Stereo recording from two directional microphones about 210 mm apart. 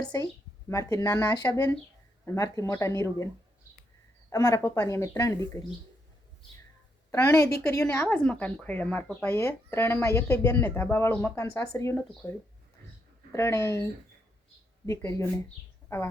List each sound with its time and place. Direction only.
0.0 s a woman's voice: 20° left (ahead or behind)
4.3 s a woman's voice: 15° left (ahead or behind)
7.1 s a woman's voice: 15° left (ahead or behind)
14.8 s a woman's voice: 15° left (ahead or behind)